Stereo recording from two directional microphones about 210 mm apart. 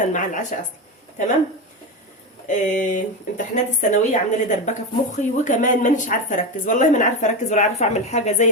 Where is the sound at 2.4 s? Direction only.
35° left (ahead or behind).